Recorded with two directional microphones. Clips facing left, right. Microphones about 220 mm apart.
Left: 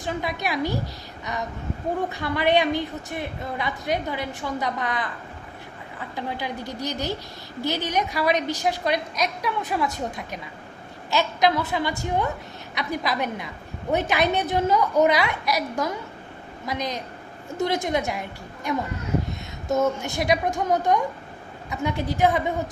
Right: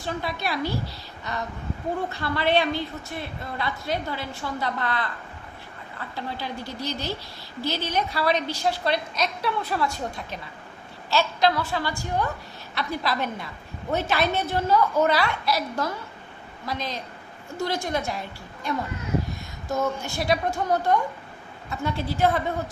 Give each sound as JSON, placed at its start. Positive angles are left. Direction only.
{"t": 0.0, "sound": "a woman's voice", "side_deg": 15}
{"t": 6.1, "sound": "a woman's voice", "side_deg": 15}